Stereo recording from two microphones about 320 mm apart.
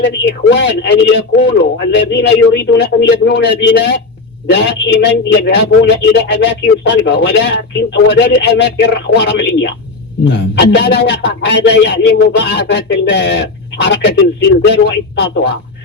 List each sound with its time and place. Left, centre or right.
0.0 s a man's voice: left